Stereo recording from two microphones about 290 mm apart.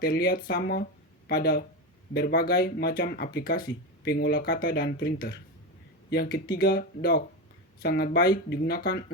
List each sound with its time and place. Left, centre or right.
0.0 s speech: left